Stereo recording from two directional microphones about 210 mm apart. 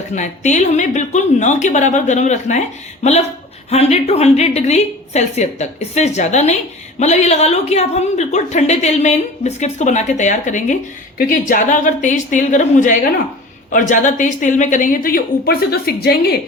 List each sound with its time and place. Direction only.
0.2 s a woman's voice: 35° left (ahead or behind)